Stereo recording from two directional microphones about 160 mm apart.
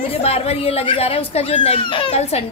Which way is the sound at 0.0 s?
40° left (ahead or behind).